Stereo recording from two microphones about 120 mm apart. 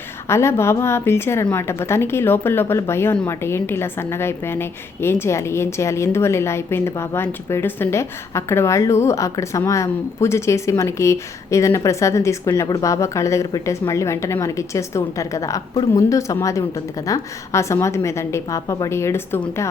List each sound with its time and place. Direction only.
0.3 s a woman's voice: 20° left (ahead or behind)